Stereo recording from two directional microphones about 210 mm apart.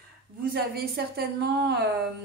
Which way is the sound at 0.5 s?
50° right (ahead or behind).